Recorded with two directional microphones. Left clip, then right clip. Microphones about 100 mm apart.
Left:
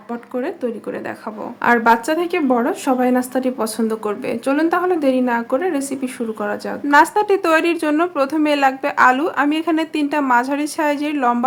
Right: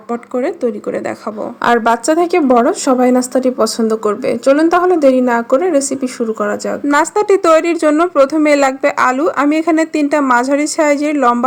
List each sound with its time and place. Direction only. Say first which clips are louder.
0.1 s a woman's voice: right 7 dB; 40° right (ahead or behind)